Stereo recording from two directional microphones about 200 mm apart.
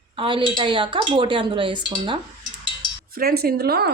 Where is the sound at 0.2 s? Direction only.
25° right (ahead or behind).